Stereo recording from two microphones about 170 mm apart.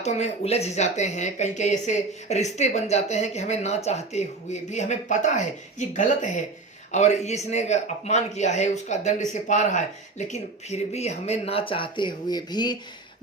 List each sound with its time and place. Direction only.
0.0 s a man's voice: 40° left (ahead or behind); by 12.7 s 25° left (ahead or behind)